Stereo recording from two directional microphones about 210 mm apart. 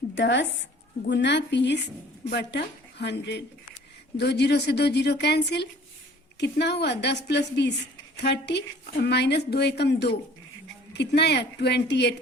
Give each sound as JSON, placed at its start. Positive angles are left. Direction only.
{"t": 0.2, "sound": "a woman's voice", "side_deg": 60}